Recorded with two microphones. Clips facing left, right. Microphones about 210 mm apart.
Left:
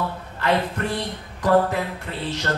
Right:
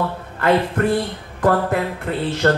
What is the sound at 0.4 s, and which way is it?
Speech, 55° right (ahead or behind).